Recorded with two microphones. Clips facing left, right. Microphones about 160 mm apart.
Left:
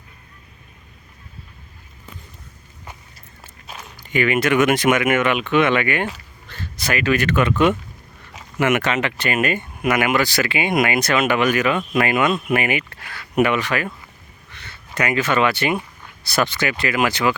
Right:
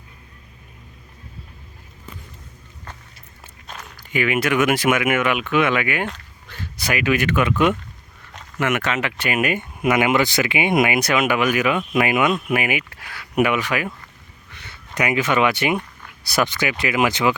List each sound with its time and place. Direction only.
3.7 s walk: 5° left (ahead or behind)
4.1 s speech: 5° right (ahead or behind)
8.3 s speech: 5° left (ahead or behind); by 13.9 s 10° right (ahead or behind)
14.9 s speech: 15° right (ahead or behind)